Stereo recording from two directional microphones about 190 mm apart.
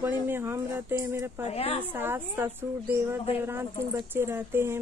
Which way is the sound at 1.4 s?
30° left (ahead or behind).